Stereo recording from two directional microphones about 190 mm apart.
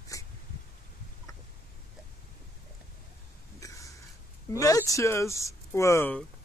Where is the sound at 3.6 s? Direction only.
15° left (ahead or behind).